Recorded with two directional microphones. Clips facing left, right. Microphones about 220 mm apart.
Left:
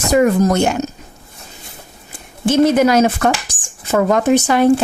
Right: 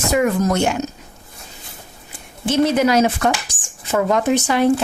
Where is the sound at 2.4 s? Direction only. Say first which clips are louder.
Left 4 dB; 50° left (ahead or behind).